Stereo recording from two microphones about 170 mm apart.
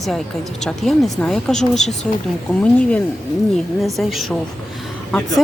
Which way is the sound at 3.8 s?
Centre (ahead or behind).